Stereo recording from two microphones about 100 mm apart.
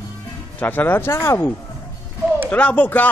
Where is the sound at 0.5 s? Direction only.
20° left (ahead or behind).